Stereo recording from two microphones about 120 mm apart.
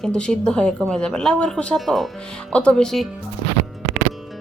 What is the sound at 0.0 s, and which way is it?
Speech, 5° left (ahead or behind).